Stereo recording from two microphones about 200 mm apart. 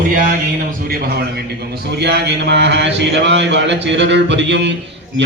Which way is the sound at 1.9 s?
55° right (ahead or behind).